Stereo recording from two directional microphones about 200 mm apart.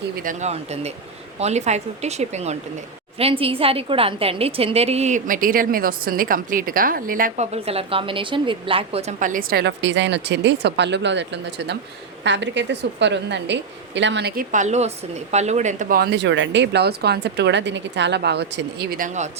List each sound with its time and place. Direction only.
0.2 s a woman's voice: 40° right (ahead or behind); by 14.4 s 55° right (ahead or behind)
14.5 s a woman's voice: 35° right (ahead or behind)